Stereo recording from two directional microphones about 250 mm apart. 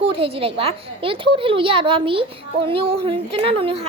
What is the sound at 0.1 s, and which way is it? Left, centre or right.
A woman's voice, right.